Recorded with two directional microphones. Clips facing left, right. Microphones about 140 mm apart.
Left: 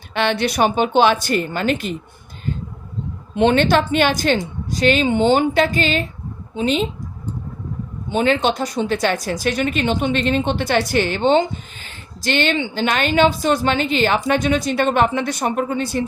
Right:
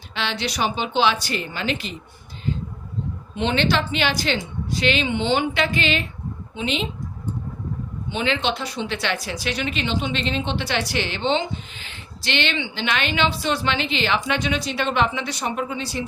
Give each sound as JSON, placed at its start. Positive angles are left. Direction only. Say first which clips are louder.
{"t": 0.1, "sound": "speech", "louder": "left 8 dB", "side_deg": 55}
{"t": 3.3, "sound": "a woman's voice", "louder": "left 7 dB", "side_deg": 50}
{"t": 8.1, "sound": "speech", "louder": "left 6 dB", "side_deg": 45}